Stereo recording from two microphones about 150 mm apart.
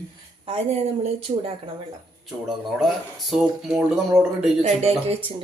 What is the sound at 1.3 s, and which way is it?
Speech, 50° right (ahead or behind).